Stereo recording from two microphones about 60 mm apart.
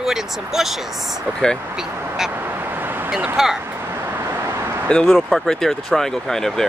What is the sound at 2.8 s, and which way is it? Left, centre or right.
Vehicle, right.